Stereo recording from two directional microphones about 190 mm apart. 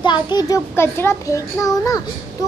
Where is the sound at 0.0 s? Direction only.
25° left (ahead or behind).